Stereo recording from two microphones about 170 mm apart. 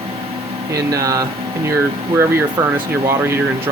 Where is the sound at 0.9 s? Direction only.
20° right (ahead or behind).